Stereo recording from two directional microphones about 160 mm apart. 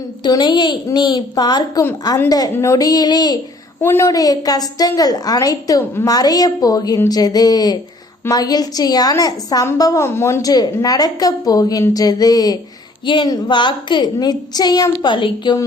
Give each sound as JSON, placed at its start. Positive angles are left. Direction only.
{"t": 0.2, "sound": "a woman's voice", "side_deg": 25}
{"t": 3.8, "sound": "a woman's voice", "side_deg": 15}